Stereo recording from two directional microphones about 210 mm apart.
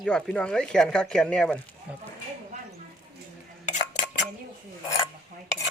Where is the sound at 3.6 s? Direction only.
35° left (ahead or behind).